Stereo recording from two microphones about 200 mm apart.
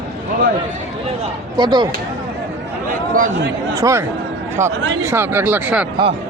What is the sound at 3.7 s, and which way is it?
A man's voice, 15° right (ahead or behind).